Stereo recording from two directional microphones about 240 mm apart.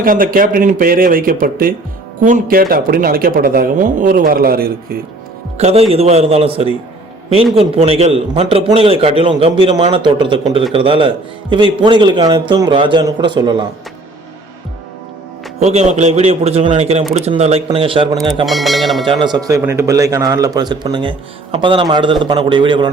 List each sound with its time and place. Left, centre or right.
0.0 s speech: right
5.5 s a man's voice: right
15.6 s a man's voice: right
18.4 s speech: centre
19.0 s a man's voice: centre